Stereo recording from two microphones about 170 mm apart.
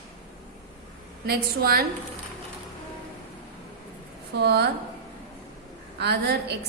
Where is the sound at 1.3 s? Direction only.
65° right (ahead or behind).